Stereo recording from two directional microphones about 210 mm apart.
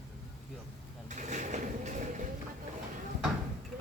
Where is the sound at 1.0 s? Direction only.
35° right (ahead or behind).